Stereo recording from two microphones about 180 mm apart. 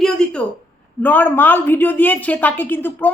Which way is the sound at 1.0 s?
10° left (ahead or behind).